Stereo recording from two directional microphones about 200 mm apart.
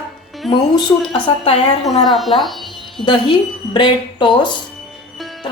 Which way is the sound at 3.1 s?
20° left (ahead or behind).